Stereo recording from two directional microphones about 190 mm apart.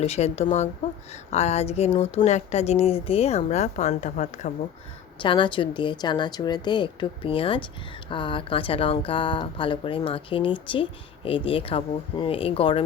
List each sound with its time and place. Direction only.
0.0 s speech: 35° left (ahead or behind)
5.2 s speech: 25° left (ahead or behind)